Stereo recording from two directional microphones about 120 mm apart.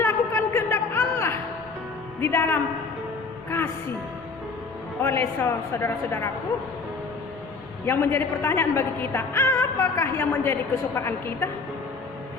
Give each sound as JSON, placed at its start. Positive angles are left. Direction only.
{"t": 0.0, "sound": "a sound", "side_deg": 20}
{"t": 2.2, "sound": "music", "side_deg": 20}
{"t": 5.0, "sound": "a woman's voice", "side_deg": 20}
{"t": 7.9, "sound": "a woman's voice", "side_deg": 20}